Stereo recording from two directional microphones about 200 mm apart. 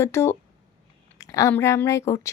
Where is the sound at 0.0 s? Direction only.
15° left (ahead or behind).